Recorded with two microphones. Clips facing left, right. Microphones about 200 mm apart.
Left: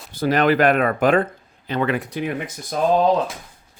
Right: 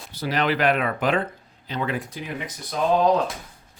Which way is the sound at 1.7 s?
65° left (ahead or behind).